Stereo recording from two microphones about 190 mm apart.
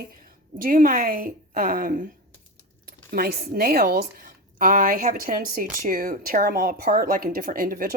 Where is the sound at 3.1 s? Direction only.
50° right (ahead or behind).